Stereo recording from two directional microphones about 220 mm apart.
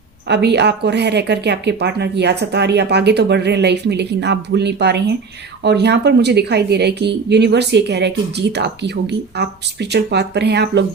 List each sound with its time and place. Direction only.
0.3 s speech: 50° right (ahead or behind)